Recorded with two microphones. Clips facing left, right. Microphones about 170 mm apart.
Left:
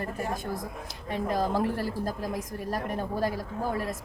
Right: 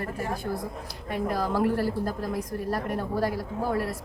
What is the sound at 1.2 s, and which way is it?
Speech, 20° left (ahead or behind).